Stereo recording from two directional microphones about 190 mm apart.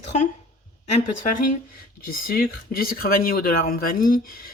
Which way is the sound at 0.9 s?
35° left (ahead or behind).